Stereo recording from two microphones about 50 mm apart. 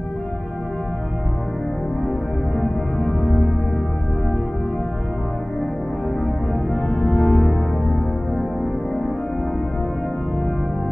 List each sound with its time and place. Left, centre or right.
2.5 s music: centre
6.7 s music: left
7.2 s music: centre